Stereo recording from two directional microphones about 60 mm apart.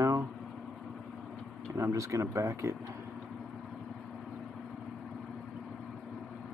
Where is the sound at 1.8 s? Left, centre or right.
Right.